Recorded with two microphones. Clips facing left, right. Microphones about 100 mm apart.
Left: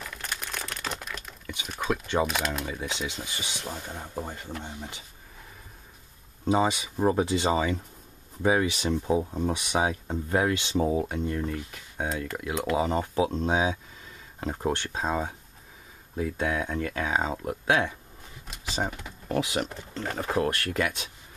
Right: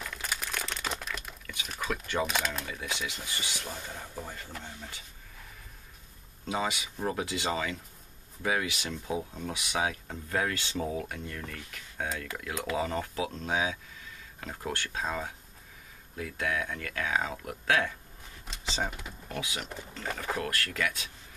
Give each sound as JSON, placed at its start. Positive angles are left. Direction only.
{"t": 0.0, "sound": "crumpling", "side_deg": 0}
{"t": 1.8, "sound": "speech", "side_deg": 20}
{"t": 2.2, "sound": "speech", "side_deg": 0}
{"t": 2.6, "sound": "speech", "side_deg": 15}
{"t": 6.4, "sound": "speech", "side_deg": 25}
{"t": 18.5, "sound": "a sound", "side_deg": 10}
{"t": 19.2, "sound": "speech", "side_deg": 40}
{"t": 20.0, "sound": "speech", "side_deg": 25}